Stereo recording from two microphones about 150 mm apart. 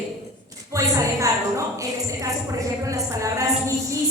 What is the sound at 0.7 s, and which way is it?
Speech, 20° right (ahead or behind).